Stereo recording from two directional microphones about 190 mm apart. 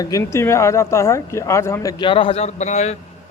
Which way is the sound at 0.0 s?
15° left (ahead or behind).